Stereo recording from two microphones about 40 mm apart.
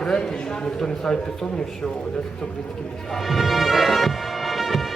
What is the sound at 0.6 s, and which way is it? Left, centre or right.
Speech, centre.